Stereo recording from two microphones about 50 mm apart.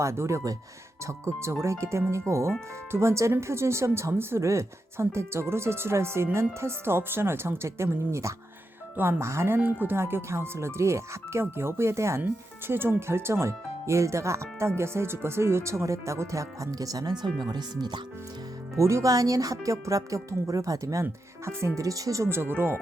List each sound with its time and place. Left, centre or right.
0.0 s speech: right
9.0 s speech: right
9.7 s speech: right
12.6 s speech: right
14.8 s speech: right
18.8 s speech: right
22.3 s speech: right